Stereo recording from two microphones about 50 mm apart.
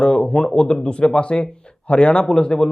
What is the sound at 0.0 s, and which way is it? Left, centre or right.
Speech, centre.